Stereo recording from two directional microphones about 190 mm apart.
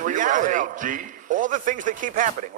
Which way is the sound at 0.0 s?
45° right (ahead or behind).